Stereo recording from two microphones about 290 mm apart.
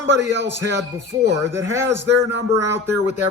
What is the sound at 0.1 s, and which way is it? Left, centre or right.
Speech, right.